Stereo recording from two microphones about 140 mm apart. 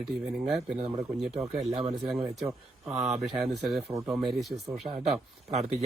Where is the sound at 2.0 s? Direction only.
Centre (ahead or behind).